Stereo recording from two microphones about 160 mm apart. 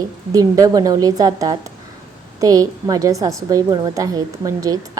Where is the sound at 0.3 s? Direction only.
20° right (ahead or behind).